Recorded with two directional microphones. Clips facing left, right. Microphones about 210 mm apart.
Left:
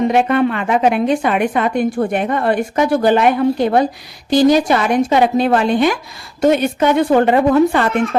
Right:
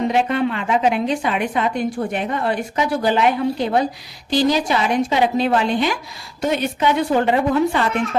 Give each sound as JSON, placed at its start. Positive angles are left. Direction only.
{"t": 0.1, "sound": "a woman's voice", "side_deg": 55}